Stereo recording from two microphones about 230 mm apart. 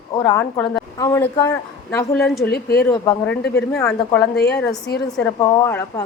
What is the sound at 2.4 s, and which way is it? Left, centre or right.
Speech, left.